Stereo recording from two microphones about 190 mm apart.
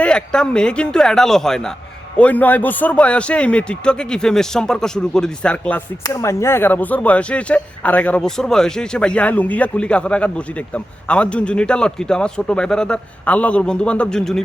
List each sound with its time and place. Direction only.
0.0 s speech: 5° left (ahead or behind)